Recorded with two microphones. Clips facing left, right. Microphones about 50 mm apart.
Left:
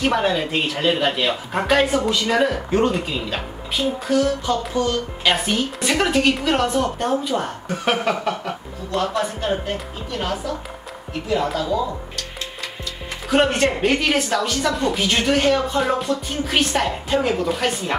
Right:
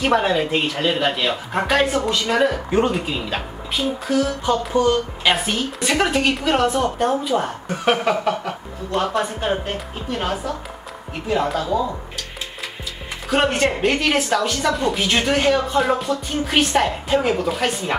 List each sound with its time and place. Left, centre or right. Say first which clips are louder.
0.0 s speech: right 2 dB; centre
4.5 s a man's voice: right 3 dB; centre
5.2 s speech: left 4 dB; centre
8.9 s a man's voice: right 1 dB; right
11.5 s a man's voice: right 1 dB; right
13.3 s speech: left 1 dB; centre